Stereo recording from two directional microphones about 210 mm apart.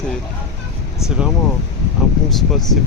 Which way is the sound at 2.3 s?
Centre (ahead or behind).